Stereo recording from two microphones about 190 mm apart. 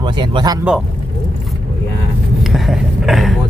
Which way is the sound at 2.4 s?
Centre (ahead or behind).